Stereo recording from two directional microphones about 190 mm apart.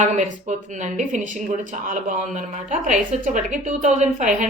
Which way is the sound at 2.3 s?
40° right (ahead or behind).